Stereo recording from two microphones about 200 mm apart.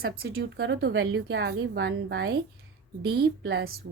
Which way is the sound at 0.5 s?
50° right (ahead or behind).